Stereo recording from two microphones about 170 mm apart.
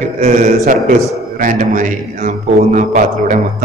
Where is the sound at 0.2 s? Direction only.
45° right (ahead or behind).